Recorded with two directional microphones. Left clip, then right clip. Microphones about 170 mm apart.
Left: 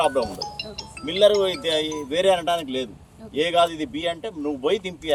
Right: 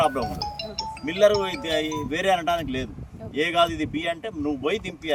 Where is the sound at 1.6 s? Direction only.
5° left (ahead or behind).